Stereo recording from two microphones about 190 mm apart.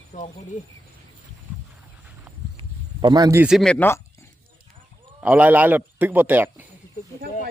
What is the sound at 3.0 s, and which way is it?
Speech, 20° right (ahead or behind).